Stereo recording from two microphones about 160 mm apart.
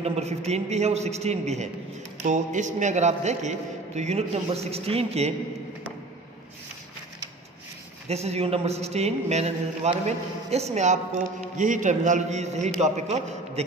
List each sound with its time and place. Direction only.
0.0 s a man's voice: 40° right (ahead or behind)
8.1 s a man's voice: 40° right (ahead or behind)